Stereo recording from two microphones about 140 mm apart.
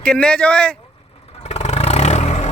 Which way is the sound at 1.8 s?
50° left (ahead or behind).